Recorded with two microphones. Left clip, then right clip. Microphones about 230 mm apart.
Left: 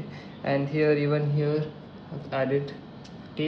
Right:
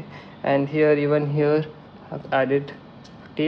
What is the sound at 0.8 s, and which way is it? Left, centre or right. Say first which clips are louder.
Speech: right 4 dB; right.